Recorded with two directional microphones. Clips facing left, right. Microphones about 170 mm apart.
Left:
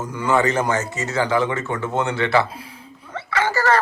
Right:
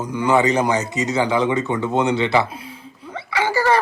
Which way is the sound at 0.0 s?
15° right (ahead or behind).